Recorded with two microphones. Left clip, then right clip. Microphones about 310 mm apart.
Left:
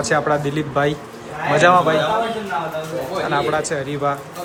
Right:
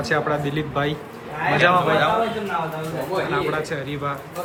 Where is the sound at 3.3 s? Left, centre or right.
Centre.